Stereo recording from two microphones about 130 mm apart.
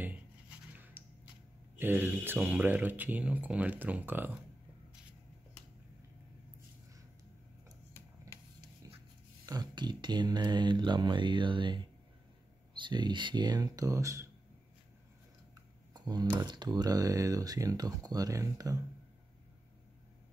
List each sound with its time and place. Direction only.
0.7 s a sound: 15° right (ahead or behind)
1.8 s speech: 15° right (ahead or behind)
9.5 s speech: 35° right (ahead or behind)
15.9 s speech: 30° right (ahead or behind)